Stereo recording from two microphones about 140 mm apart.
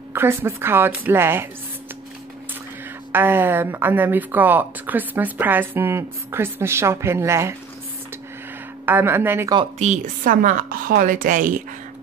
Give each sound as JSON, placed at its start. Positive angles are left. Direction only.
{"t": 0.1, "sound": "speech", "side_deg": -15}
{"t": 3.1, "sound": "speech", "side_deg": -15}
{"t": 8.8, "sound": "speech", "side_deg": -15}
{"t": 9.8, "sound": "a woman's voice", "side_deg": -65}